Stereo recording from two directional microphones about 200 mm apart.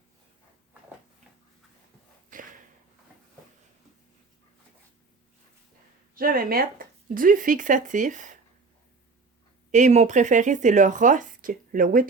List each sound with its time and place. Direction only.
2.3 s a sound: 40° right (ahead or behind)
6.1 s speech: 45° right (ahead or behind)
9.7 s speech: 35° right (ahead or behind)